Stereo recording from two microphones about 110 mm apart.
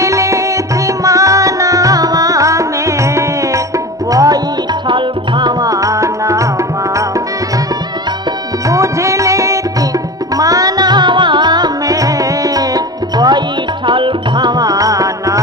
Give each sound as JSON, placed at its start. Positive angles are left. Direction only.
{"t": 0.0, "sound": "tabla", "side_deg": -30}
{"t": 4.1, "sound": "music", "side_deg": -30}
{"t": 4.8, "sound": "music", "side_deg": -45}
{"t": 8.6, "sound": "music", "side_deg": -30}
{"t": 13.8, "sound": "music", "side_deg": -45}